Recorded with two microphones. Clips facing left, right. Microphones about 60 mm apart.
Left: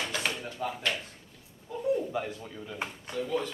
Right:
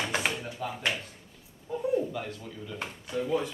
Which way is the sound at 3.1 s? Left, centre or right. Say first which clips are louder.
Right 3 dB; centre.